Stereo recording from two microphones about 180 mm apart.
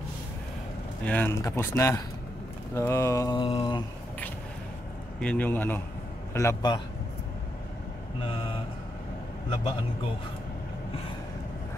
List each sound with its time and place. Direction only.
1.0 s speech: 10° left (ahead or behind)
2.7 s mantra: 15° left (ahead or behind); by 3.8 s 30° left (ahead or behind)
5.2 s speech: 10° left (ahead or behind)
6.3 s mantra: 20° left (ahead or behind)